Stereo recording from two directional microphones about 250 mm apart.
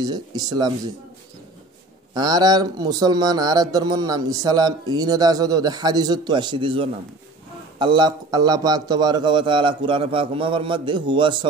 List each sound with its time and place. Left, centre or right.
0.0 s speech: centre
2.1 s a man's voice: centre